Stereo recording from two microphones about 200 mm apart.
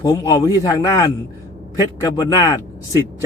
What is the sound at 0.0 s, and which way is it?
A man's voice, 15° left (ahead or behind).